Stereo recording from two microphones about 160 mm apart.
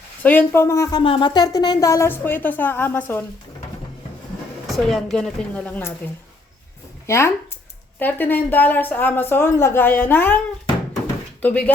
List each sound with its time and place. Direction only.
0.2 s speech: 10° left (ahead or behind)
4.7 s a woman's voice: centre (ahead or behind)
7.1 s speech: 15° left (ahead or behind)
11.4 s speech: 10° left (ahead or behind)